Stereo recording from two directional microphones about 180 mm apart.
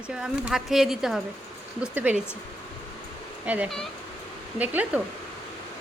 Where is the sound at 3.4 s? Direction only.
5° right (ahead or behind).